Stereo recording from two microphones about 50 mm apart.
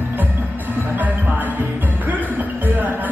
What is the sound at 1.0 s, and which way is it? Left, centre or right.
Music, right.